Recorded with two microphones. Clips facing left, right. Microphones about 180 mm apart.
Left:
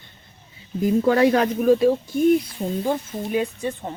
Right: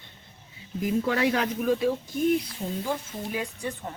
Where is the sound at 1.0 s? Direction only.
40° left (ahead or behind).